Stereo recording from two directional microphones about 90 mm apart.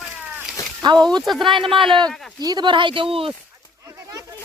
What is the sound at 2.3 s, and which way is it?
Speech, 50° right (ahead or behind).